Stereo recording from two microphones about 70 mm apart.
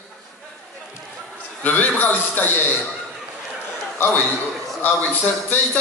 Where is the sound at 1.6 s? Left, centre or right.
Left.